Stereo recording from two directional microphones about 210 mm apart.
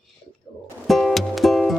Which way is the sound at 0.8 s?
Centre (ahead or behind).